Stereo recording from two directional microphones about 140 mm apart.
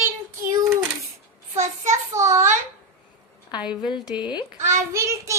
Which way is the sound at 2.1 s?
20° right (ahead or behind).